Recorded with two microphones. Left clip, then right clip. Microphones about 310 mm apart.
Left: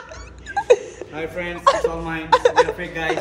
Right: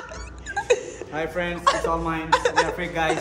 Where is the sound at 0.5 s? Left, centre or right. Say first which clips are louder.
Left 6 dB; centre.